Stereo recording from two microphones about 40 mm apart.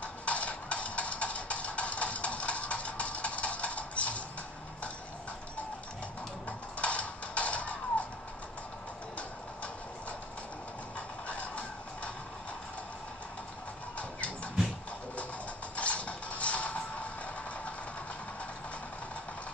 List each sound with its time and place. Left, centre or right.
0.0 s music: left
6.8 s music: left
11.0 s music: left
13.9 s a sound: left
15.7 s music: left